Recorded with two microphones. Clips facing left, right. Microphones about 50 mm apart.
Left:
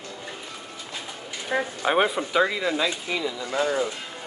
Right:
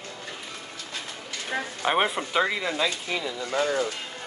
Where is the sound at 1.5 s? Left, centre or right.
Left.